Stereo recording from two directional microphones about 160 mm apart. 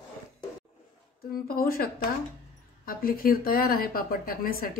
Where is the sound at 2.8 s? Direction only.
65° left (ahead or behind).